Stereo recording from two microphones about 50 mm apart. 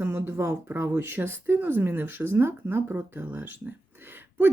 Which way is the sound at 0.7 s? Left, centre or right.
Right.